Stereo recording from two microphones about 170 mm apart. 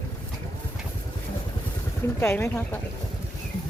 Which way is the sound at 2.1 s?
15° left (ahead or behind).